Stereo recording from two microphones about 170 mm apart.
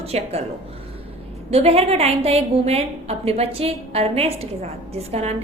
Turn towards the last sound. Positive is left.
turn(degrees=-40)  # may be behind; listen again after turning